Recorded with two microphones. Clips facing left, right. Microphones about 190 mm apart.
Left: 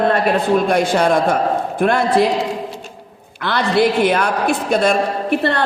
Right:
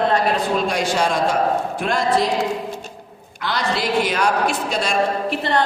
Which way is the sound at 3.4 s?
60° left (ahead or behind).